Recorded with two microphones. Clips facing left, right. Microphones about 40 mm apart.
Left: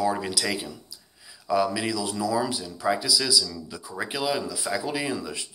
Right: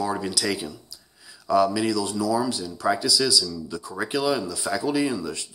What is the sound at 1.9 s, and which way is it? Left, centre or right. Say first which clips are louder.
Speech: right 2 dB; left.